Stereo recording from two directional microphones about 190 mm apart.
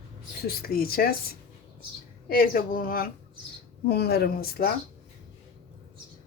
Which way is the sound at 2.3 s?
50° left (ahead or behind).